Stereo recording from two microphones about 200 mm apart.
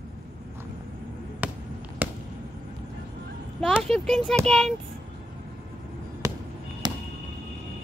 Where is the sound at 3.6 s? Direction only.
Centre (ahead or behind).